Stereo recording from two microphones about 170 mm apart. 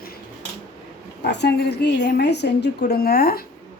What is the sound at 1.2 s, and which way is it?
A woman's voice, 85° left.